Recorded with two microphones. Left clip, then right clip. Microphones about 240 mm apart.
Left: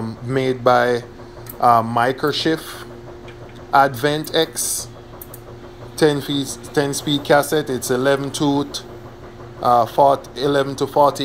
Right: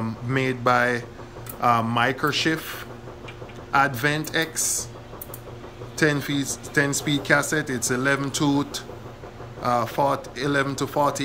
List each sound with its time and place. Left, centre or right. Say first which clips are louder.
0.0 s speech: left 4 dB; centre
1.7 s speech: left 7 dB; right
2.0 s speech: left 4 dB; centre
5.9 s speech: left 5 dB; centre